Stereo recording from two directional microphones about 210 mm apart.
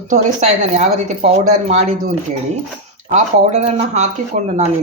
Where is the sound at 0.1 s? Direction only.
35° right (ahead or behind).